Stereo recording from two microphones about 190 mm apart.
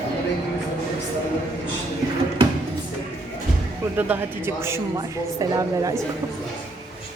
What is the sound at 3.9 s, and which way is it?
A woman's voice, 10° right (ahead or behind).